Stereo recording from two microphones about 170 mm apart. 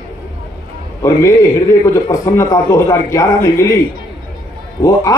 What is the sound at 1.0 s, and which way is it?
A man's voice, 15° left (ahead or behind).